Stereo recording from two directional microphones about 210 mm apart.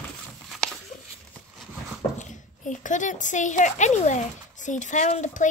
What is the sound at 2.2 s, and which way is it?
Speech, 35° left (ahead or behind).